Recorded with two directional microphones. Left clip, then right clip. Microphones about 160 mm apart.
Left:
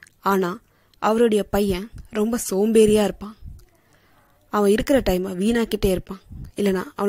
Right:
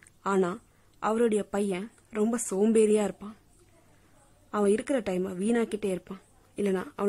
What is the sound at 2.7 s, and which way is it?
Speech, 20° left (ahead or behind).